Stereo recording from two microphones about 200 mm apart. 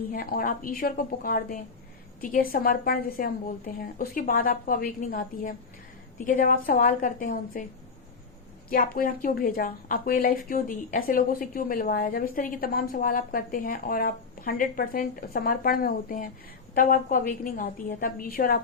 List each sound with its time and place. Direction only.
0.1 s a woman's voice: 45° left (ahead or behind)
8.7 s a woman's voice: 45° left (ahead or behind)